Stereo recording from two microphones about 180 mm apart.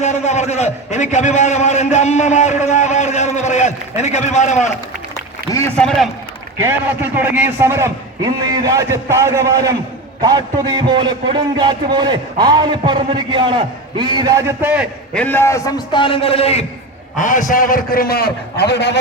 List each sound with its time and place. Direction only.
0.0 s a man's voice: 40° left (ahead or behind)
5.5 s a man's voice: 10° left (ahead or behind)
6.6 s a man's voice: 10° right (ahead or behind)
15.1 s a man's voice: 10° left (ahead or behind); by 16.6 s 35° left (ahead or behind)
17.2 s a man's voice: 45° left (ahead or behind); by 18.9 s 70° left (ahead or behind)